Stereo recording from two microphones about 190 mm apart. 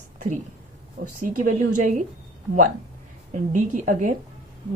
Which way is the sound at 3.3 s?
40° right (ahead or behind).